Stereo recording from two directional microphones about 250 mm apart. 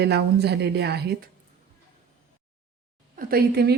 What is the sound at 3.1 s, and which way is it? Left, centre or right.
Speech, right.